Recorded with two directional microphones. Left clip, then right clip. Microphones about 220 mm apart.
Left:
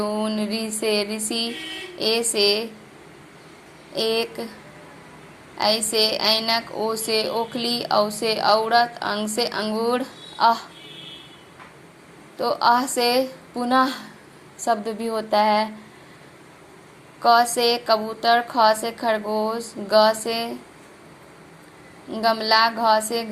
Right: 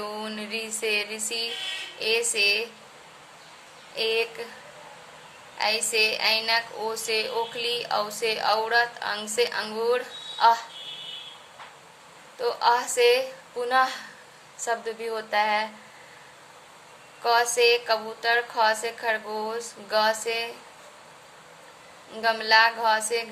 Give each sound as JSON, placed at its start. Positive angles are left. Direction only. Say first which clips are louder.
{"t": 0.0, "sound": "a woman's voice", "louder": "left 8 dB", "side_deg": 15}
{"t": 3.9, "sound": "a woman's voice", "louder": "left 3 dB", "side_deg": 20}
{"t": 5.6, "sound": "a woman's voice", "louder": "left 3 dB", "side_deg": 20}
{"t": 12.4, "sound": "a woman's voice", "louder": "left 4 dB", "side_deg": 15}
{"t": 17.2, "sound": "a woman's voice", "louder": "left 4 dB", "side_deg": 20}
{"t": 22.1, "sound": "a woman's voice", "louder": "left 2 dB", "side_deg": 15}